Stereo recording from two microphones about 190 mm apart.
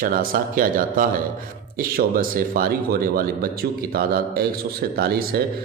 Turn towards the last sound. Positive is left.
turn(degrees=-55)  # may be behind; listen again after turning